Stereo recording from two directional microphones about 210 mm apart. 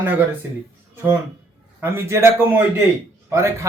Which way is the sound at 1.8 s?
10° right (ahead or behind).